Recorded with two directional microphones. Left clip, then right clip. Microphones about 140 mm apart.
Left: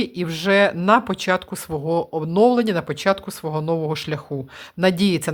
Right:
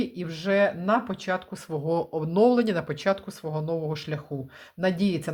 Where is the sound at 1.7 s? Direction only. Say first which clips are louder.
Left 5 dB; 20° left (ahead or behind).